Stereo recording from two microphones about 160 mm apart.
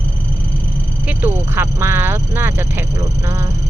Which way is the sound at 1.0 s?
15° right (ahead or behind).